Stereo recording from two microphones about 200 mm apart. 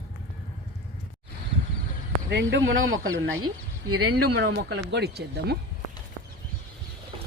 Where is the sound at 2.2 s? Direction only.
60° right (ahead or behind); by 3.3 s 80° right.